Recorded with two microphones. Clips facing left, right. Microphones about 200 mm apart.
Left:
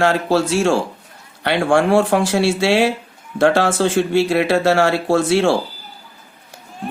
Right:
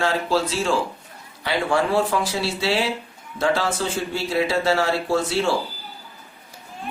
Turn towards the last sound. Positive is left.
turn(degrees=80)